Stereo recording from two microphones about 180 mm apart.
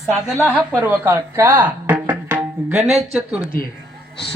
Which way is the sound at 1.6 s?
10° right (ahead or behind).